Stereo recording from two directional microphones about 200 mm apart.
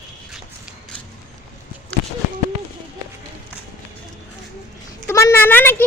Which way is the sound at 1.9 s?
5° left (ahead or behind).